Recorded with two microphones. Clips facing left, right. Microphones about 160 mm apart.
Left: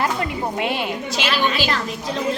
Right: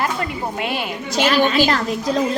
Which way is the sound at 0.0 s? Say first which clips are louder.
Even; 20° left (ahead or behind).